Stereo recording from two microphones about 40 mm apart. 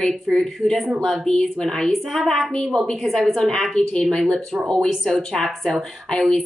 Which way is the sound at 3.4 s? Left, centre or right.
Centre.